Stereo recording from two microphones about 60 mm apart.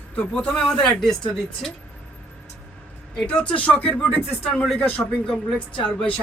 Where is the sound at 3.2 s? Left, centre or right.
Centre.